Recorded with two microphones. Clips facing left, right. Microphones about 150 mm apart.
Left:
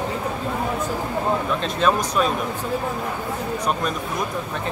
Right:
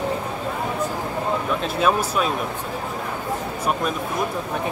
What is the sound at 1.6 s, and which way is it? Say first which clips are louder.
Speech: even; 5° right (ahead or behind).